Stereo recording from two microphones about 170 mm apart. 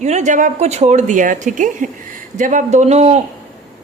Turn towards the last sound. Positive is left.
turn(degrees=-40)  # may be behind; listen again after turning